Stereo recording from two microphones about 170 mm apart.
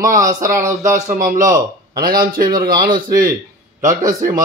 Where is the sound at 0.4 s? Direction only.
15° right (ahead or behind).